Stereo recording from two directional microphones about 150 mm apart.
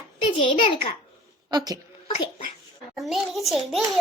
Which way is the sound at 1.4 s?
25° right (ahead or behind).